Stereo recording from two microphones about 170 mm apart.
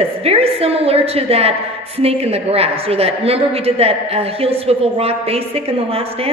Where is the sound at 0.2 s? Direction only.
35° right (ahead or behind).